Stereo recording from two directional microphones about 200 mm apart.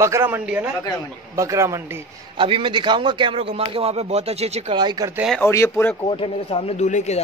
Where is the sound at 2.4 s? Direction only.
25° right (ahead or behind).